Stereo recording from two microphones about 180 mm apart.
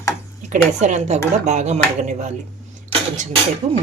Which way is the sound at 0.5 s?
40° right (ahead or behind).